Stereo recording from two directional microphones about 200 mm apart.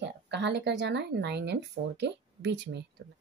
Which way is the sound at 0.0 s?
60° right (ahead or behind).